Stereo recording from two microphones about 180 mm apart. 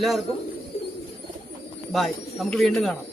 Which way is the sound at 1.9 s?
Centre (ahead or behind).